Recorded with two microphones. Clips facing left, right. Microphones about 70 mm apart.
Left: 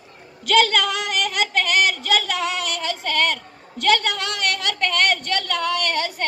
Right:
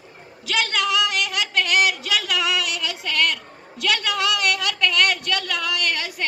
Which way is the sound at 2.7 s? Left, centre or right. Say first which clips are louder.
Left 2 dB; left.